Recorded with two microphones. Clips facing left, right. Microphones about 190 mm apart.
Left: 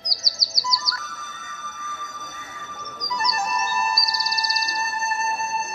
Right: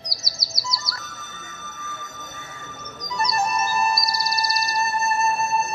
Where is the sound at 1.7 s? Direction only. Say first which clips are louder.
Even; 25° right (ahead or behind).